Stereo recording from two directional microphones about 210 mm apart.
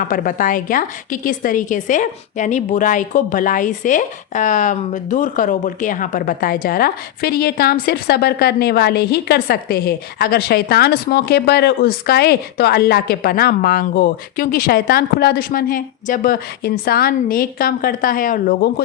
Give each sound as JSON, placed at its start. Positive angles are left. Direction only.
{"t": 0.0, "sound": "a woman's voice", "side_deg": 40}